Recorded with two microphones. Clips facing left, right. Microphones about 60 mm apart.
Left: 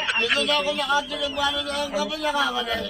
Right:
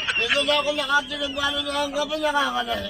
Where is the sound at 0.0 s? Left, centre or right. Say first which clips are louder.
Even; centre.